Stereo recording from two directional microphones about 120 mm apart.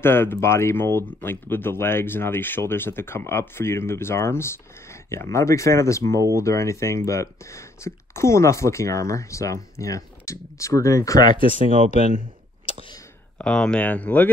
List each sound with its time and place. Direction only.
0.0 s speech: 20° left (ahead or behind)
13.4 s speech: 5° left (ahead or behind)